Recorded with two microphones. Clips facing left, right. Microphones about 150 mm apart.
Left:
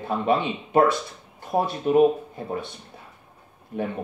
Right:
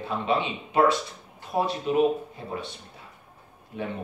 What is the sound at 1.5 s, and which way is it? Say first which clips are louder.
Speech: left 3 dB; 35° left (ahead or behind).